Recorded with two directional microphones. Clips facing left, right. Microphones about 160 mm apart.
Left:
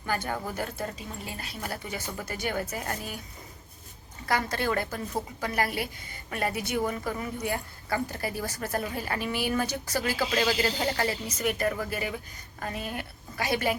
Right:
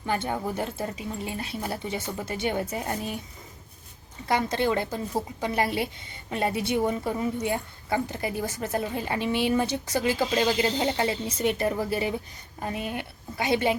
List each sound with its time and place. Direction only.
0.0 s a woman's voice: 20° right (ahead or behind)
4.3 s a woman's voice: 20° right (ahead or behind)